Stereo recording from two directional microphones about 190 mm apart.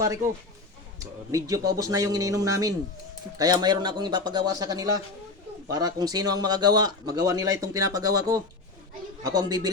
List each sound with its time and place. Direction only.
0.0 s speech: 15° right (ahead or behind)